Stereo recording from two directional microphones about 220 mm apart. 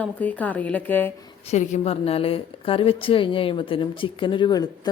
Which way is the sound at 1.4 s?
35° left (ahead or behind).